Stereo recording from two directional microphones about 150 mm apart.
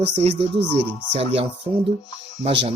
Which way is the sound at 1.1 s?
40° right (ahead or behind).